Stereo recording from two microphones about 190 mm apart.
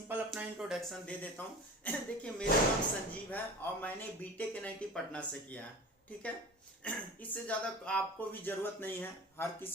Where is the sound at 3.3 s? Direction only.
10° left (ahead or behind).